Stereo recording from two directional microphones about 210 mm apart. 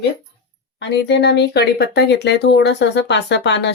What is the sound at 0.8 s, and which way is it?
Speech, 55° left (ahead or behind).